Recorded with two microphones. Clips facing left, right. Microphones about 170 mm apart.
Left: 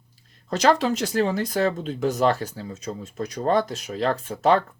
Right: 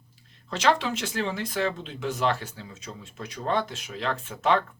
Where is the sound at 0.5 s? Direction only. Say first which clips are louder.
Left 5 dB; 40° left (ahead or behind).